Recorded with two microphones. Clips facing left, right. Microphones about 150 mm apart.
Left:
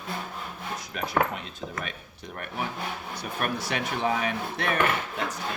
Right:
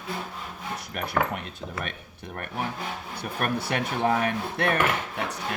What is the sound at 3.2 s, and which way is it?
Speech, 55° right (ahead or behind).